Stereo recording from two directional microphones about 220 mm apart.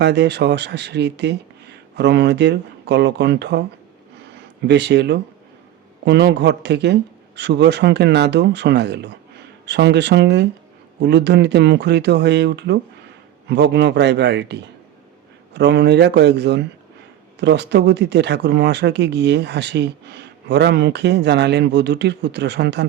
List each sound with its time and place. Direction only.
0.0 s speech: 50° right (ahead or behind)
4.6 s speech: 50° right (ahead or behind)